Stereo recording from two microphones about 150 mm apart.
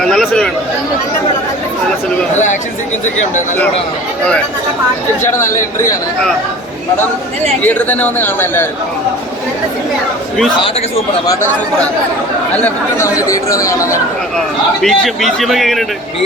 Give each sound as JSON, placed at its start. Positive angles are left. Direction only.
{"t": 0.1, "sound": "speech", "side_deg": 5}
{"t": 5.2, "sound": "speech", "side_deg": 15}
{"t": 7.6, "sound": "speech", "side_deg": 10}
{"t": 12.6, "sound": "speech", "side_deg": 20}
{"t": 14.8, "sound": "a man's voice", "side_deg": 0}